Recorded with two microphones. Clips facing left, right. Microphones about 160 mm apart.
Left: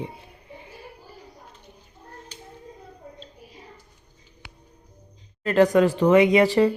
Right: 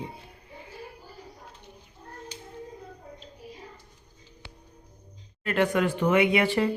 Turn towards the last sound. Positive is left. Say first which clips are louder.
# left 6 dB
turn(degrees=40)  # may be behind; listen again after turning